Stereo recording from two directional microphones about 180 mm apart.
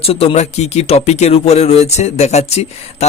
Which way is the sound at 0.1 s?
35° left (ahead or behind).